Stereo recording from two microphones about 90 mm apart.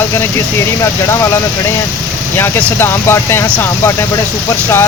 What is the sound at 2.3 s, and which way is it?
Speech, 25° left (ahead or behind).